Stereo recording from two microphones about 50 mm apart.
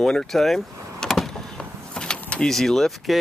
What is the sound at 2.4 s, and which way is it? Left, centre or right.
Speech, centre.